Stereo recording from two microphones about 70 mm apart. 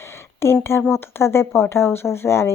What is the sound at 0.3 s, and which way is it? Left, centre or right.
Speech, left.